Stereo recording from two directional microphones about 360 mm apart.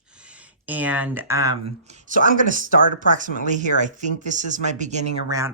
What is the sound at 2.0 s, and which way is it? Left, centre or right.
Speech, right.